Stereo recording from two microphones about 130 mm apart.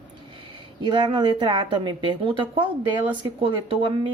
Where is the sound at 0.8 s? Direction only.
40° right (ahead or behind).